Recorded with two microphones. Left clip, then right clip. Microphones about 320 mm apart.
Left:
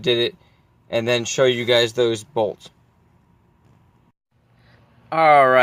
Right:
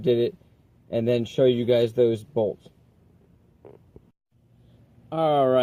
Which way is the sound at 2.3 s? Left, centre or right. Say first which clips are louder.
Left 3 dB; left.